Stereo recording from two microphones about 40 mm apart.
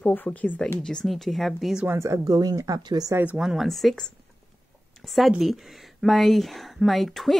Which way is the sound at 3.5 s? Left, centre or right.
Centre.